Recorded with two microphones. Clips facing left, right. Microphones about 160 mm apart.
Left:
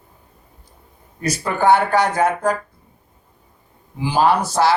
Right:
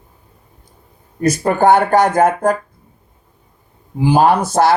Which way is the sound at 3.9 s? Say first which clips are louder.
Right 4 dB; 50° right (ahead or behind).